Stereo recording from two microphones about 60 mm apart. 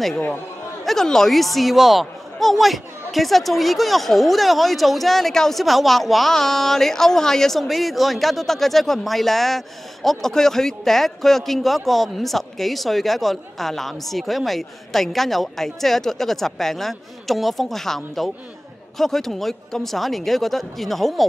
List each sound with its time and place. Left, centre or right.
0.8 s speech: centre